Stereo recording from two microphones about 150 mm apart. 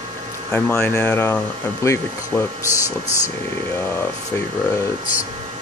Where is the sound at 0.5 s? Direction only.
10° left (ahead or behind).